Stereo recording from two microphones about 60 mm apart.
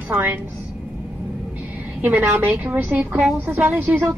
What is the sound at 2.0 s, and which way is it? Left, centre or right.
A woman's voice, right.